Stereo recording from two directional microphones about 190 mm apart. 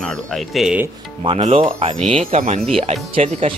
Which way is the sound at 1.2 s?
35° right (ahead or behind).